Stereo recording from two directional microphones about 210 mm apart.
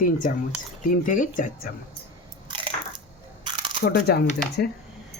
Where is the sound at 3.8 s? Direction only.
50° left (ahead or behind).